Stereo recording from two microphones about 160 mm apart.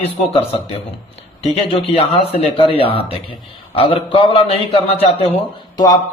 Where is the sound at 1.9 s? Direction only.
40° left (ahead or behind).